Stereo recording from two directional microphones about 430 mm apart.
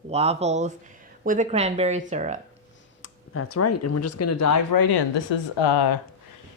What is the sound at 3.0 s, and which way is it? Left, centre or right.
Speech, left.